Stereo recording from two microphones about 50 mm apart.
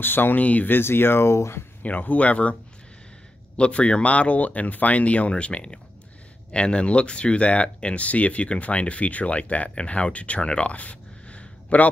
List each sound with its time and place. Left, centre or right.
0.0 s speech: left
0.4 s speech: left
0.7 s speech: left
1.8 s speech: left
3.5 s speech: left